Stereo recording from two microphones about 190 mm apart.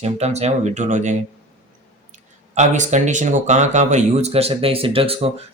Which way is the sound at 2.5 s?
40° right (ahead or behind).